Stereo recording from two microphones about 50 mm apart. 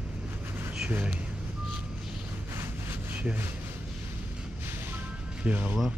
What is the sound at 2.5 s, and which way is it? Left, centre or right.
Wind noise, right.